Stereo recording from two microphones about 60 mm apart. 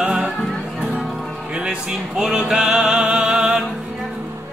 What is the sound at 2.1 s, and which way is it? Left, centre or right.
Music, centre.